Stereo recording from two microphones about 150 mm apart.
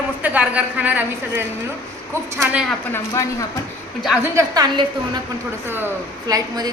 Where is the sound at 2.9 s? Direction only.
20° left (ahead or behind).